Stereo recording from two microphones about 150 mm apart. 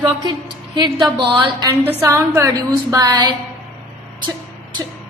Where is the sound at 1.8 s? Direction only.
20° right (ahead or behind).